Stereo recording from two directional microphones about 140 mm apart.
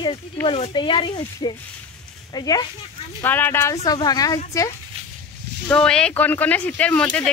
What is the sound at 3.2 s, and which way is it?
Speech, 15° left (ahead or behind).